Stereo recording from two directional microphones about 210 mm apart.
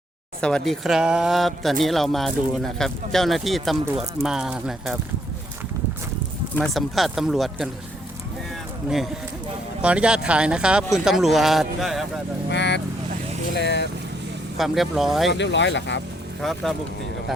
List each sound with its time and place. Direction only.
0.4 s speech: centre (ahead or behind)
6.6 s speech: centre (ahead or behind)
9.8 s speech: 5° right (ahead or behind)
12.5 s speech: 55° left (ahead or behind)
14.6 s speech: centre (ahead or behind)
15.3 s speech: 60° left (ahead or behind)
16.4 s speech: centre (ahead or behind)